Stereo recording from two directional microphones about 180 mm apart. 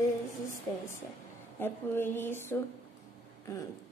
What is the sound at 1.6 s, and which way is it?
A woman's voice, 10° left (ahead or behind).